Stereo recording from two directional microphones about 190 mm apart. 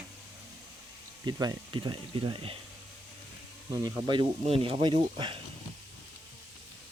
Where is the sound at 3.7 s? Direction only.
20° right (ahead or behind).